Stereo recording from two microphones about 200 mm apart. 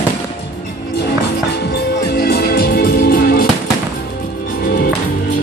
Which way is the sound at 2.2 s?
50° left (ahead or behind).